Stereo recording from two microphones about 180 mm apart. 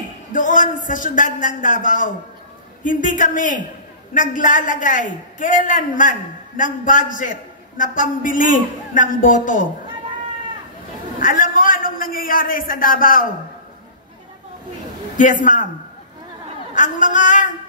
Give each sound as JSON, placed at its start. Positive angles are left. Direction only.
{"t": 0.3, "sound": "a man's voice", "side_deg": 45}
{"t": 11.1, "sound": "a man's voice", "side_deg": 50}
{"t": 15.1, "sound": "a man's voice", "side_deg": 45}
{"t": 16.7, "sound": "speech", "side_deg": 45}